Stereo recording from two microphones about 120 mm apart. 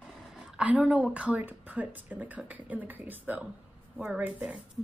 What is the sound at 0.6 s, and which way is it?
Speech, 10° right (ahead or behind).